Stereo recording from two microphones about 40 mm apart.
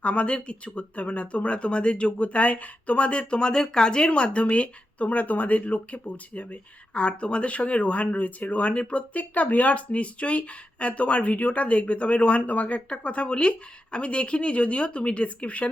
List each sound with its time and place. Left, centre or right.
0.0 s speech: left